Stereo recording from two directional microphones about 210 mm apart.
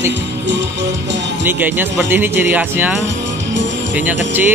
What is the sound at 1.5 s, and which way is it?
Music, 10° right (ahead or behind).